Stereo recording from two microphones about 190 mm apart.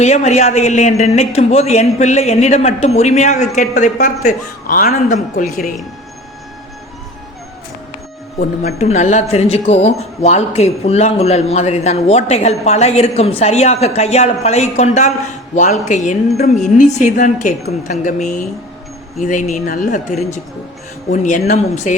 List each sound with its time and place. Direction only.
0.0 s speech: 35° left (ahead or behind)
8.4 s speech: 35° left (ahead or behind)